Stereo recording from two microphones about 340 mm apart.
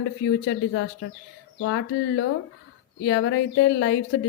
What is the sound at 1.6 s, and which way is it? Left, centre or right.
Speech, left.